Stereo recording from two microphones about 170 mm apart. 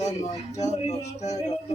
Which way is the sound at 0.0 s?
40° left (ahead or behind).